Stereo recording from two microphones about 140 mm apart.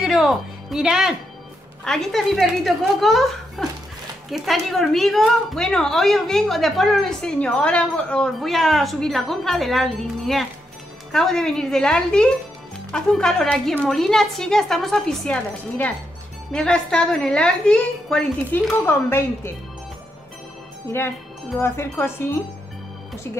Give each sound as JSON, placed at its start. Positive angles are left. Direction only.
{"t": 0.0, "sound": "a woman's voice", "side_deg": -5}
{"t": 16.5, "sound": "a woman's voice", "side_deg": 5}
{"t": 21.5, "sound": "speech", "side_deg": 15}